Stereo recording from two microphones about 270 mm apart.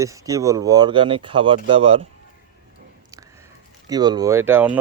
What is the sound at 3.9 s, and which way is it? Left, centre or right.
Speech, centre.